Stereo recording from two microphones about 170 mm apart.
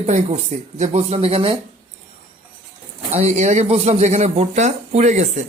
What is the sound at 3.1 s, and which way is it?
Speech, 40° right (ahead or behind).